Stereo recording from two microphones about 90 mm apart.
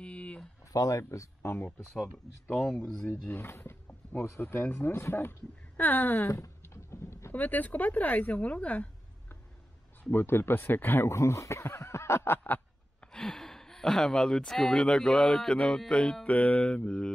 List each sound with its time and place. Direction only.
0.0 s a sound: 15° left (ahead or behind)
0.7 s speech: 40° left (ahead or behind)
2.5 s speech: 5° left (ahead or behind)
3.3 s speech: 25° left (ahead or behind)
6.4 s a sound: 35° left (ahead or behind)
7.3 s speech: 20° left (ahead or behind)
10.1 s speech: 25° left (ahead or behind)
13.1 s speech: 5° left (ahead or behind)